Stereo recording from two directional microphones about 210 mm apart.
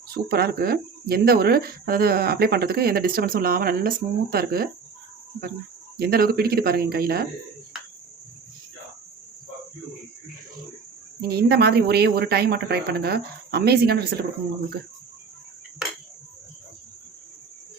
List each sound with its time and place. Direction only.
0.1 s speech: 45° right (ahead or behind)
6.0 s speech: 45° right (ahead or behind)
11.2 s speech: 50° right (ahead or behind)